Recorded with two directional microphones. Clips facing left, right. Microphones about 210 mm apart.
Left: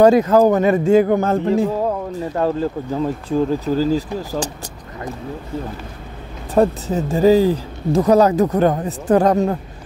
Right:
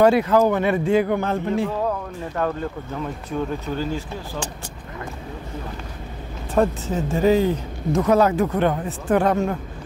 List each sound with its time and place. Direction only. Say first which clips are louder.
0.0 s speech: left 4 dB; 40° left (ahead or behind)
2.1 s speech: left 5 dB; 30° left (ahead or behind)
6.5 s speech: left 4 dB; 35° left (ahead or behind)